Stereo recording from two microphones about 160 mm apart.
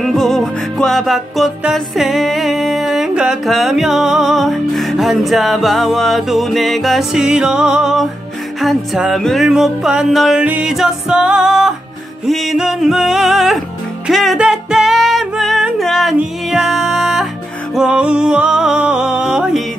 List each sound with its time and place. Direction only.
0.0 s music: centre (ahead or behind)